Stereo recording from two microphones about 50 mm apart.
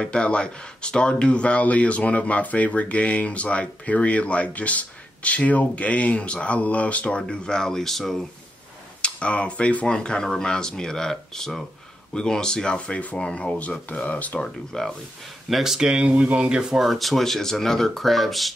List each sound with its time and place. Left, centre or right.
0.0 s speech: left; by 8.3 s centre
9.0 s speech: left
14.4 s speech: centre
15.5 s speech: centre
16.8 s speech: centre